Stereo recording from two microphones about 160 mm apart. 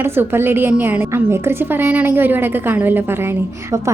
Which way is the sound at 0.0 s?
15° right (ahead or behind).